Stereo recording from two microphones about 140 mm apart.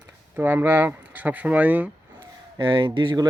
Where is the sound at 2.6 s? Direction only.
35° right (ahead or behind).